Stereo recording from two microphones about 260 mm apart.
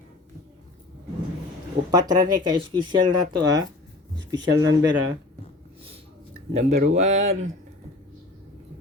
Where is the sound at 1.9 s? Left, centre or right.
Centre.